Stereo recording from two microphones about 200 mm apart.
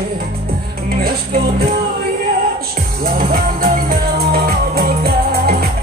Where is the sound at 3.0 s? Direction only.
45° right (ahead or behind).